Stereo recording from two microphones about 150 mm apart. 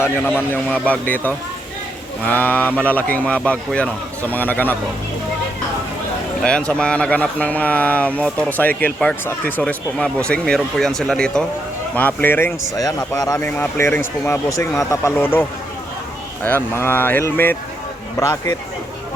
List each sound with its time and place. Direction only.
0.2 s speech: 15° left (ahead or behind)
6.4 s speech: 5° left (ahead or behind)